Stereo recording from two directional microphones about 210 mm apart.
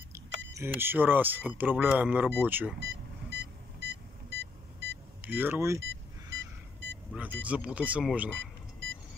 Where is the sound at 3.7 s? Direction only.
55° right (ahead or behind).